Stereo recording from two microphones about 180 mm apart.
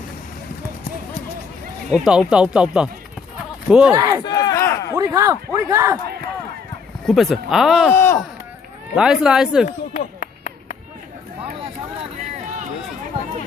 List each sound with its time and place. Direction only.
1.9 s speech: 5° right (ahead or behind)
3.9 s speech: 20° right (ahead or behind)
4.2 s speech: 25° left (ahead or behind)
4.9 s a man's voice: 15° right (ahead or behind)
7.0 s speech: centre (ahead or behind)
7.9 s speech: 15° left (ahead or behind)
9.0 s speech: 5° right (ahead or behind)
9.9 s a sound: 50° left (ahead or behind)